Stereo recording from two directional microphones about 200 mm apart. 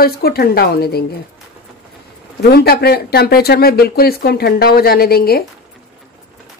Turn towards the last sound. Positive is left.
turn(degrees=50)  # may be behind; listen again after turning